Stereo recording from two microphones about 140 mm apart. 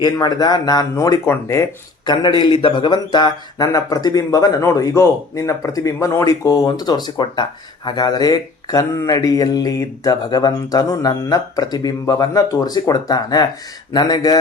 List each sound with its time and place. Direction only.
0.0 s speech: 30° left (ahead or behind)
2.4 s speech: 40° left (ahead or behind)